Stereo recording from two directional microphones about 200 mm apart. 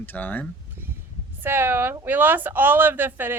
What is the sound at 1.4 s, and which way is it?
A woman's voice, 10° right (ahead or behind).